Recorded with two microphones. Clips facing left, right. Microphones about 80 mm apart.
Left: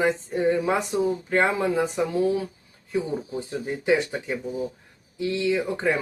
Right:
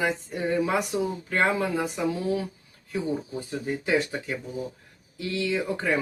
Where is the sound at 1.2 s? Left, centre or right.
Left.